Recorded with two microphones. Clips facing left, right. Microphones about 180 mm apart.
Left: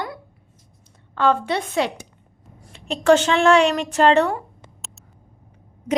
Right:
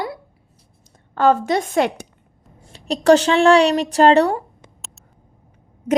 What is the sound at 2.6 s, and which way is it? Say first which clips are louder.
A woman's voice: right 4 dB; 35° right (ahead or behind).